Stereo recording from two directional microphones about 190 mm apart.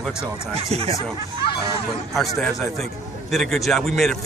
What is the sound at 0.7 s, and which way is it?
Speech, 30° right (ahead or behind).